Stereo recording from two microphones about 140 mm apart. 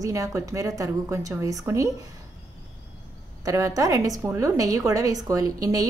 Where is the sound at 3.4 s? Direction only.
25° right (ahead or behind).